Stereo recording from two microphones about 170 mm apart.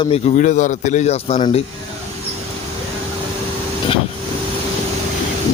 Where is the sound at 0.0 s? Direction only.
35° left (ahead or behind).